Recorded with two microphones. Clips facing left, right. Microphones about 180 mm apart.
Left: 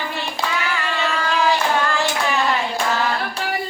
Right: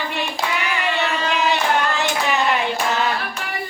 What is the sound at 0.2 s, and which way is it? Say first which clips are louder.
Child singing: right 1 dB; 15° right (ahead or behind).